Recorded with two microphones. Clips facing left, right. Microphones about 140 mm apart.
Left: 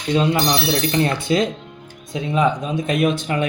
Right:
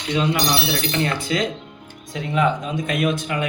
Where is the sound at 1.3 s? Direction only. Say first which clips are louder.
Left 4 dB; 30° left (ahead or behind).